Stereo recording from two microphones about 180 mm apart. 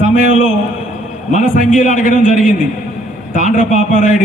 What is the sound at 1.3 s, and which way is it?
A man's voice, 45° left (ahead or behind).